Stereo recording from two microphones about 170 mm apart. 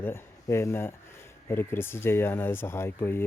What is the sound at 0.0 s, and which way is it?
Speech, 15° left (ahead or behind).